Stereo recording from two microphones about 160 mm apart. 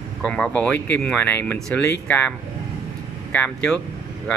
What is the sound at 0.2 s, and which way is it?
Speech, 5° left (ahead or behind).